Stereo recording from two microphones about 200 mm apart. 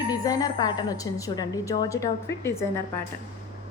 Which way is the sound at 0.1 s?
20° left (ahead or behind).